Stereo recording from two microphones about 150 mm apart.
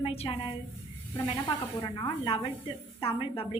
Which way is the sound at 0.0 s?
35° left (ahead or behind).